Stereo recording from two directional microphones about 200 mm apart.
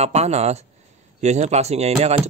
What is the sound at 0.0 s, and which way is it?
Speech, 30° right (ahead or behind).